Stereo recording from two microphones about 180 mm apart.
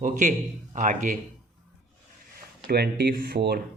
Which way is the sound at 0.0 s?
45° right (ahead or behind).